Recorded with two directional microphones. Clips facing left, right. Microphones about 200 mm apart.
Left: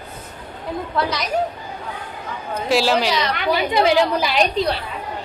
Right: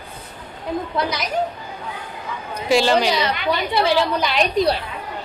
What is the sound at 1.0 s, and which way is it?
Speech, 20° right (ahead or behind).